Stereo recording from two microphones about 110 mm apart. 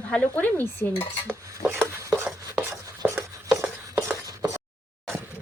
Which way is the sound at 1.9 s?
25° right (ahead or behind).